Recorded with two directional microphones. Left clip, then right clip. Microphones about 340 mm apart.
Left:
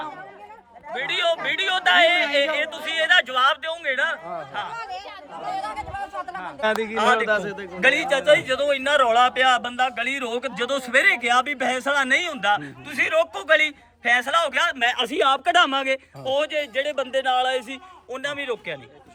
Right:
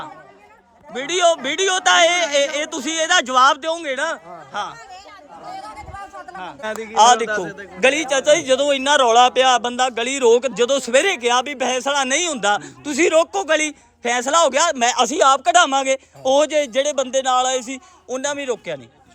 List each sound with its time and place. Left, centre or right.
0.9 s a man's voice: centre
4.8 s speech: centre
5.4 s a man's voice: left
6.9 s a man's voice: centre
7.3 s a man's voice: left
7.8 s a man's voice: centre